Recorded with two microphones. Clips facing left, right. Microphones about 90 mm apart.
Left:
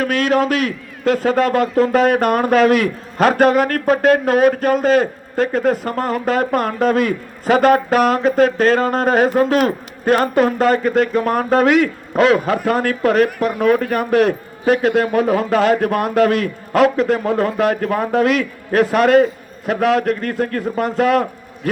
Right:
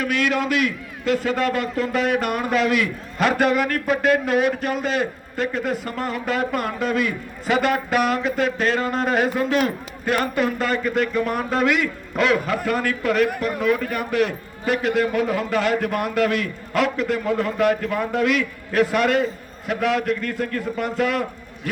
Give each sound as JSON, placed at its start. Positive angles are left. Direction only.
{"t": 0.0, "sound": "a man's voice", "side_deg": 40}